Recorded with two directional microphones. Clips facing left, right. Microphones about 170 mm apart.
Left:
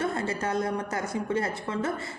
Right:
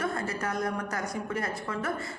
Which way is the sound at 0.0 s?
25° left (ahead or behind).